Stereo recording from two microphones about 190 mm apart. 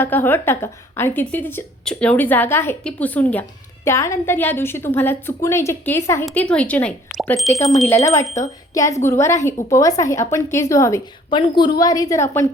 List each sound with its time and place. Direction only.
0.0 s a woman's voice: 10° left (ahead or behind)
7.9 s a woman's voice: 15° left (ahead or behind)